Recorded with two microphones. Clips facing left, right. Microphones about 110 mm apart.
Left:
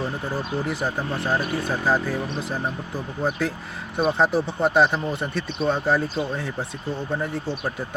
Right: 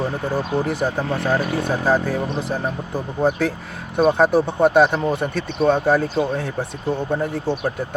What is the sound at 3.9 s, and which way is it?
Speech, 50° right (ahead or behind).